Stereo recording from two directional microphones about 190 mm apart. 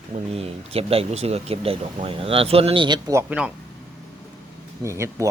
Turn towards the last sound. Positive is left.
turn(degrees=-15)  # may be behind; listen again after turning